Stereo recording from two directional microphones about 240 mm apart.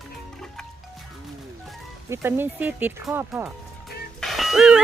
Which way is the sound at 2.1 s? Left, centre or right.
Centre.